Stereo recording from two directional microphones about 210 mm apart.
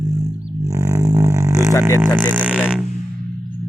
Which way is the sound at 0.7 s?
15° right (ahead or behind).